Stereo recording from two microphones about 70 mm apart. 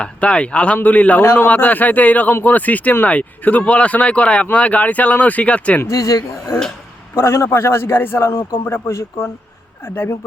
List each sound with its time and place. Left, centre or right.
0.0 s speech: centre
5.9 s speech: left
7.2 s a man's voice: left